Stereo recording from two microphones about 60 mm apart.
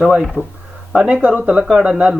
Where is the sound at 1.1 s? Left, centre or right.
Right.